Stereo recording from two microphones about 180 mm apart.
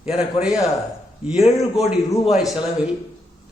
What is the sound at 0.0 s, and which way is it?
A man's voice, 5° right (ahead or behind).